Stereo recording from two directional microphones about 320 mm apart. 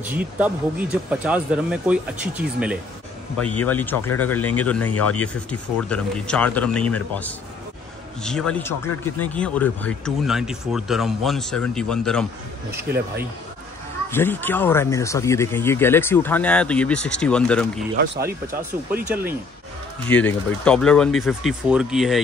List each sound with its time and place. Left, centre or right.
0.0 s speech: centre
14.1 s speech: centre
17.9 s speech: right
20.1 s speech: centre